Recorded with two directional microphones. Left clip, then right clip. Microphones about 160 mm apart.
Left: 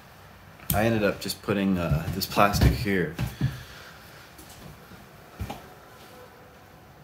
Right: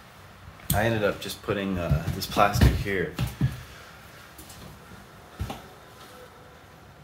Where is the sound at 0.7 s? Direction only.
20° left (ahead or behind).